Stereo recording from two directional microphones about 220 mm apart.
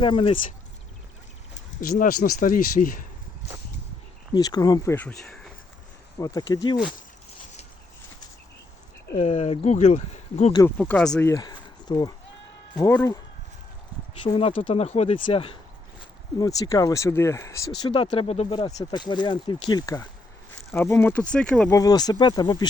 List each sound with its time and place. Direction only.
0.0 s speech: 25° left (ahead or behind)
1.8 s speech: 40° left (ahead or behind)
4.4 s speech: 15° left (ahead or behind)
6.1 s speech: 15° left (ahead or behind)
9.2 s speech: 30° left (ahead or behind)
10.6 s speech: 5° left (ahead or behind)
11.3 s a sound: 20° left (ahead or behind)
12.7 s speech: 15° left (ahead or behind)
14.3 s speech: 25° left (ahead or behind); by 21.7 s 5° left (ahead or behind)
21.7 s speech: 15° left (ahead or behind)